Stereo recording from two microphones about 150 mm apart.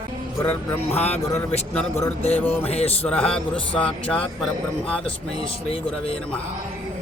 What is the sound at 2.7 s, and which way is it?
Speech, 45° left (ahead or behind).